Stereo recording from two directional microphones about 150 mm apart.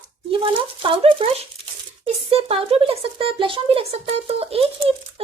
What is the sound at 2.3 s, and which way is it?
Speech, 40° right (ahead or behind).